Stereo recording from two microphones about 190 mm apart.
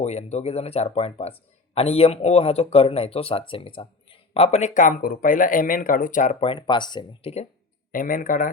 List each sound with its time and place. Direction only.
0.0 s speech: 35° left (ahead or behind)
7.9 s speech: 45° left (ahead or behind)